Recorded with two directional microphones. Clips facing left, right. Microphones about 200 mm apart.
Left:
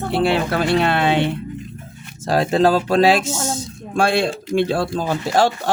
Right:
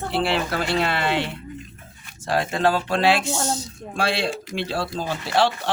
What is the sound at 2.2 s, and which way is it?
Speech, 40° left (ahead or behind).